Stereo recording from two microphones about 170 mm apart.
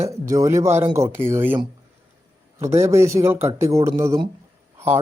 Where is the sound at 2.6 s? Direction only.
15° right (ahead or behind).